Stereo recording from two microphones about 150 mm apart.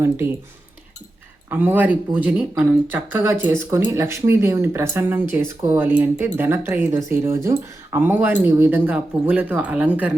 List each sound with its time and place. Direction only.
0.2 s speech: 20° right (ahead or behind)
1.5 s speech: 15° right (ahead or behind)